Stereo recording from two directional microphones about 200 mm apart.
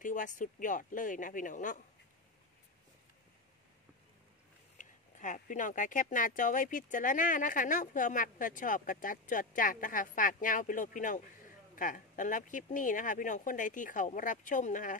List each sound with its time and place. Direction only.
0.0 s speech: 40° left (ahead or behind)
4.7 s speech: 40° left (ahead or behind)